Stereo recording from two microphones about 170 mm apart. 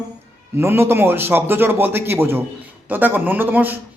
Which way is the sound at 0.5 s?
15° right (ahead or behind).